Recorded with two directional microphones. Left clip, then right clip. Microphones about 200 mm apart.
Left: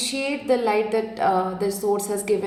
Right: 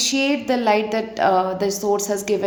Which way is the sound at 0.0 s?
45° right (ahead or behind).